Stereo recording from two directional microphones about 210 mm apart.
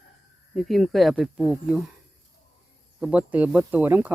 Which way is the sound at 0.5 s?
Centre (ahead or behind).